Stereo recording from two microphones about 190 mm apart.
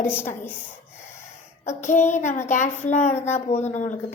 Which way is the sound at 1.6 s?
40° left (ahead or behind).